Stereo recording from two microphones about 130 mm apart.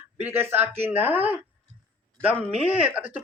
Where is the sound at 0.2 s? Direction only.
15° right (ahead or behind).